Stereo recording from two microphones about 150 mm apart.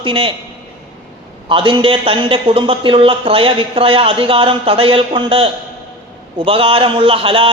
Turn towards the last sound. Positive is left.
turn(degrees=-35)  # may be behind; listen again after turning